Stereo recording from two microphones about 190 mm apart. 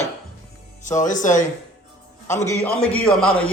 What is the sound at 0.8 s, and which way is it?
Speech, 40° left (ahead or behind).